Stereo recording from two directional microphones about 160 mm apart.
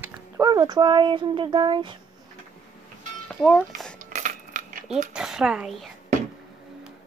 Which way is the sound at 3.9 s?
55° right (ahead or behind).